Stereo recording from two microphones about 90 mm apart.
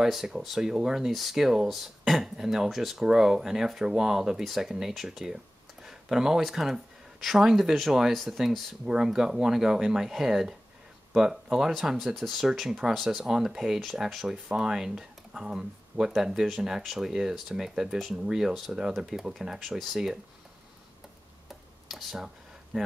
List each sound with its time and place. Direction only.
0.0 s speech: 5° right (ahead or behind)
21.5 s a sound: 5° right (ahead or behind)
22.7 s speech: 15° right (ahead or behind)